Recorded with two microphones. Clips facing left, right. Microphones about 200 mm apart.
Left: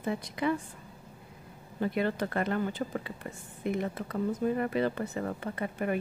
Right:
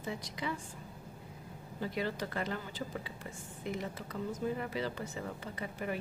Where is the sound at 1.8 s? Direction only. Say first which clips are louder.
Left 7 dB; 55° left (ahead or behind).